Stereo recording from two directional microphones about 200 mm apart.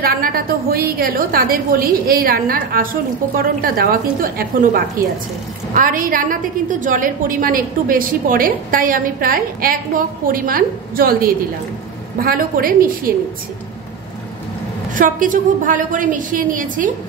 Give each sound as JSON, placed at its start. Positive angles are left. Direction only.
{"t": 0.0, "sound": "a woman's voice", "side_deg": -45}
{"t": 15.0, "sound": "a woman's voice", "side_deg": -40}